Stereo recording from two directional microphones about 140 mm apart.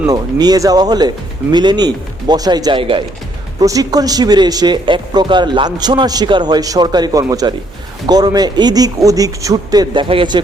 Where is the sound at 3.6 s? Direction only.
25° right (ahead or behind).